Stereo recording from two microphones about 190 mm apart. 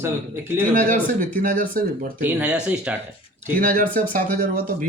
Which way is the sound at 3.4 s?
45° right (ahead or behind).